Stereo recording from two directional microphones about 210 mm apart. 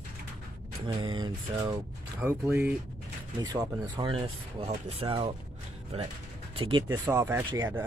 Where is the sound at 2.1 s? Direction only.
10° right (ahead or behind); by 5.3 s 25° right (ahead or behind).